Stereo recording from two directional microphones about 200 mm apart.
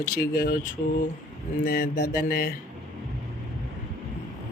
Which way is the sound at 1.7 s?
50° left (ahead or behind).